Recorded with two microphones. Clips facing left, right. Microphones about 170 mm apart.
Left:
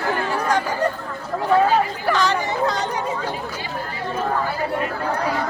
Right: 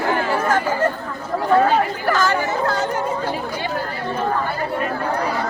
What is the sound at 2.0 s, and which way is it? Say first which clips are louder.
Speech: right 1 dB; centre (ahead or behind).